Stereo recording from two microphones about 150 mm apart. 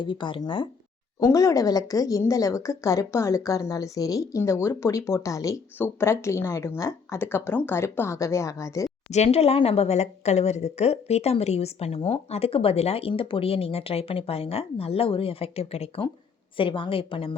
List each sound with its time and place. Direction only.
0.0 s a woman's voice: 35° left (ahead or behind)
1.2 s speech: 20° left (ahead or behind)
9.0 s a woman's voice: 45° left (ahead or behind)